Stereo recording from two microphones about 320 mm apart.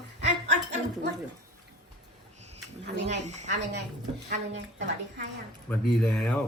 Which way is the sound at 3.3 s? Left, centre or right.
Right.